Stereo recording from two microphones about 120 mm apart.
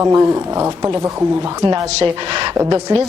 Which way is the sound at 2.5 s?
25° right (ahead or behind).